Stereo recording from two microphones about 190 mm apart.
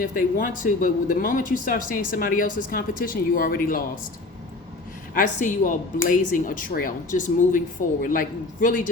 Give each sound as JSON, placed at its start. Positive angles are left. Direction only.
{"t": 0.0, "sound": "speech", "side_deg": 50}
{"t": 5.1, "sound": "speech", "side_deg": 45}